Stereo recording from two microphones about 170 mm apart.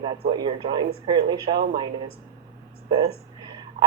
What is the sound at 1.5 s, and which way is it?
Speech, 65° right (ahead or behind).